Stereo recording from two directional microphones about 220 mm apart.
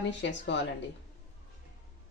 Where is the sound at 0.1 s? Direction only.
55° left (ahead or behind).